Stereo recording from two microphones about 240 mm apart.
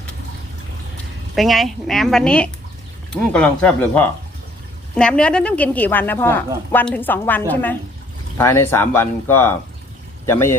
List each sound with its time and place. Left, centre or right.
1.4 s a woman's voice: centre